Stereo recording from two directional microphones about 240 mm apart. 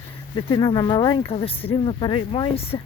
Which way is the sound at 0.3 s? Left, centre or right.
Left.